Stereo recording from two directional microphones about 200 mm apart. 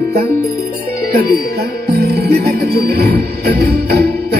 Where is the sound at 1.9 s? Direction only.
55° right (ahead or behind).